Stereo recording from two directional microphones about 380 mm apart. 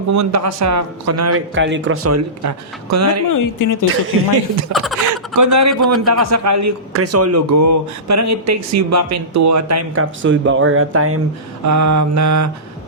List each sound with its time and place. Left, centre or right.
0.1 s a man's voice: right
3.2 s speech: left
4.1 s a man's voice: right
5.4 s a man's voice: right
11.6 s a man's voice: right